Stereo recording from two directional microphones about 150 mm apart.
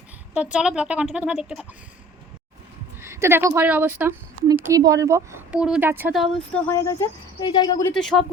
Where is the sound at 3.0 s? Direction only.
15° right (ahead or behind).